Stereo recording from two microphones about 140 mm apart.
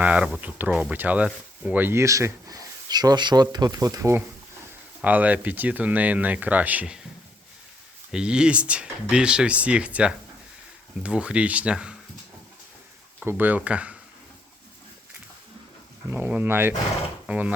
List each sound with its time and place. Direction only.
0.0 s speech: 10° right (ahead or behind)
5.0 s speech: 10° right (ahead or behind)
8.1 s speech: 5° right (ahead or behind)
13.2 s speech: 10° right (ahead or behind)
16.0 s speech: 15° right (ahead or behind)